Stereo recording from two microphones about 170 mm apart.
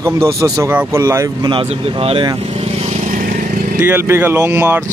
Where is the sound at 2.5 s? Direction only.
40° right (ahead or behind).